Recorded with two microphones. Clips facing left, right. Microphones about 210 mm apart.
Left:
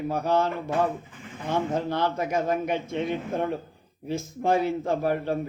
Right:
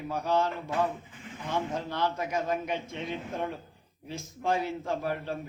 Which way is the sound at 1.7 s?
50° left (ahead or behind).